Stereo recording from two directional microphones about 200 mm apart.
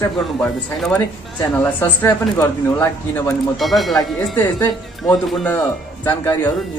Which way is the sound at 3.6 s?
Centre (ahead or behind).